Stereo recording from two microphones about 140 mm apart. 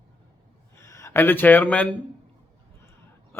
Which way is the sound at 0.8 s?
20° left (ahead or behind).